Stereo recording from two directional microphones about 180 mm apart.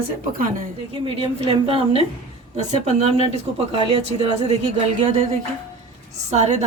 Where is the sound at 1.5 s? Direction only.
30° right (ahead or behind).